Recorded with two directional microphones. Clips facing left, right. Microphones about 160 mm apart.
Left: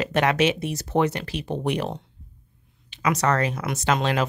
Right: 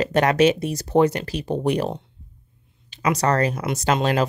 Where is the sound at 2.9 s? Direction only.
35° right (ahead or behind).